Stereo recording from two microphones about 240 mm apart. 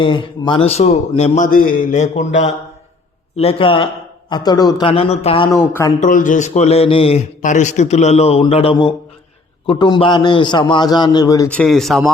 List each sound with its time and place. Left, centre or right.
0.0 s a man's voice: centre
6.0 s a man's voice: left; by 12.1 s centre